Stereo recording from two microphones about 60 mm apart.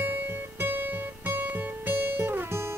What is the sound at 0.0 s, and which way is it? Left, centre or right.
Guitar, right.